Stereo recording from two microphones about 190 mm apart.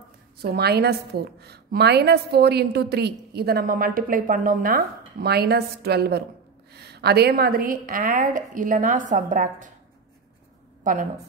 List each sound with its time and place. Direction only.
0.4 s a woman's voice: 55° right (ahead or behind); by 9.7 s 40° right (ahead or behind)
10.8 s a woman's voice: 45° right (ahead or behind)